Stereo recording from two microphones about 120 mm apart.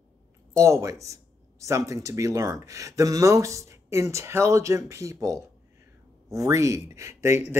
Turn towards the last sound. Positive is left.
turn(degrees=-25)  # may be behind; listen again after turning